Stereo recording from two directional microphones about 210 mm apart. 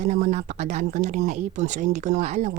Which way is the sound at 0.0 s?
35° right (ahead or behind).